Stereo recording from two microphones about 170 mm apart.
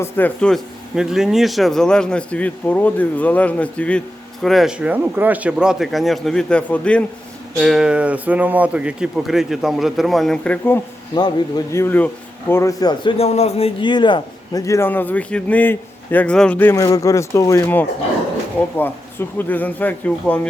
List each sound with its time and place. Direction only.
0.0 s a man's voice: 10° left (ahead or behind)
7.6 s speech: 5° right (ahead or behind)
11.1 s a man's voice: 25° left (ahead or behind)
13.1 s a man's voice: 40° left (ahead or behind); by 20.5 s 5° left (ahead or behind)